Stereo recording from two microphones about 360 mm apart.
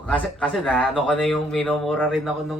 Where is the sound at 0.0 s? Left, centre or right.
Centre.